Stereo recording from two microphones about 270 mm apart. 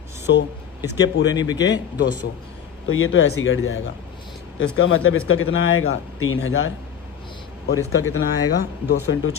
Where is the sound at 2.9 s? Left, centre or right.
Left.